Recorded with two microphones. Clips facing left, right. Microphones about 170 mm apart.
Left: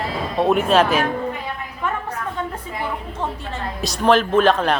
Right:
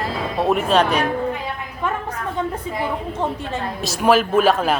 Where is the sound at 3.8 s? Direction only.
5° right (ahead or behind).